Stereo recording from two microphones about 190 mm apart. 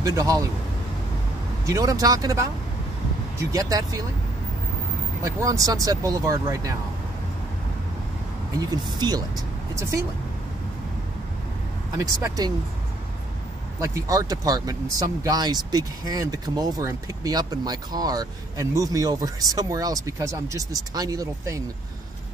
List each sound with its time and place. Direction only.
0.0 s speech: 15° right (ahead or behind)
1.7 s speech: 20° right (ahead or behind)
5.2 s speech: 15° right (ahead or behind)
8.5 s speech: 20° right (ahead or behind)
12.0 s speech: 20° right (ahead or behind)
13.7 s speech: 15° right (ahead or behind)